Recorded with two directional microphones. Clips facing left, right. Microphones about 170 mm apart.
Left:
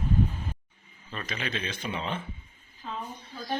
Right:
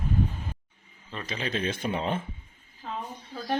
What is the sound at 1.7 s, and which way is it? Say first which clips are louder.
Speech: right 4 dB; 50° right (ahead or behind).